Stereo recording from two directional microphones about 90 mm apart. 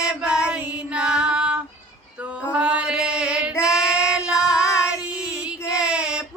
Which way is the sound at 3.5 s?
35° left (ahead or behind).